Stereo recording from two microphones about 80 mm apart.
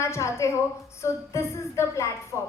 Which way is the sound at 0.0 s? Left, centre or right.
Left.